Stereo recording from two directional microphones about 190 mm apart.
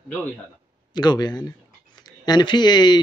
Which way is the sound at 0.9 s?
20° left (ahead or behind).